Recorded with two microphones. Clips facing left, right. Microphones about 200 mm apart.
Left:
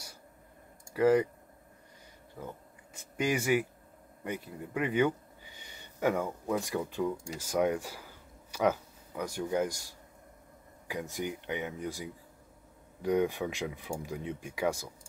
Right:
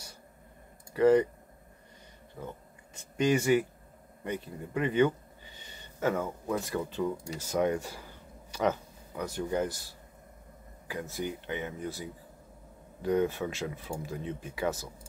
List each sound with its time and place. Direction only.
0.9 s speech: 10° left (ahead or behind)
2.4 s speech: 10° left (ahead or behind)